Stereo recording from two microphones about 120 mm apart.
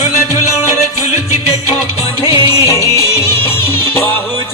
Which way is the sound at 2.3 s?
50° left (ahead or behind).